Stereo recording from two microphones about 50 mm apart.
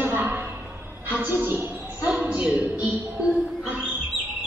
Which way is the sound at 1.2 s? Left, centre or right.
Right.